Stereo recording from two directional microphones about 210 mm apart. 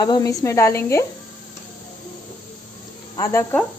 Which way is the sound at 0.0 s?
15° left (ahead or behind).